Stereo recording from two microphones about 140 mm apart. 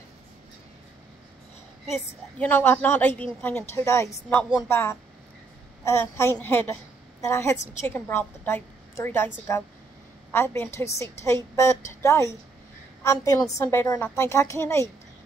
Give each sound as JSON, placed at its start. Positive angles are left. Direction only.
{"t": 2.3, "sound": "a woman's voice", "side_deg": 10}